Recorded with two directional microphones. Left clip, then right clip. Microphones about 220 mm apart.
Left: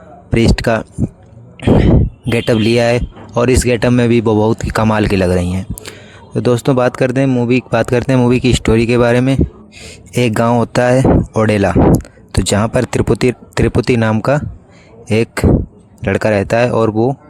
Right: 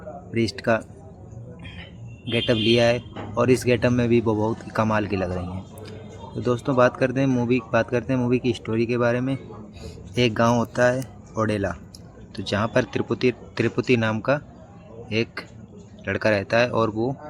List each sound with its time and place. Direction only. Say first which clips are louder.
0.3 s speech: left 9 dB; 45° left (ahead or behind)
2.3 s speech: left 7 dB; 50° left (ahead or behind)